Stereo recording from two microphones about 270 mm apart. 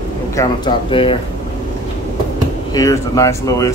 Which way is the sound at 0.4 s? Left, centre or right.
Centre.